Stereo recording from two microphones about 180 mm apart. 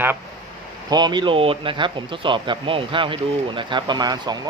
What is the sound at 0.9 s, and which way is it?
Speech, 25° right (ahead or behind).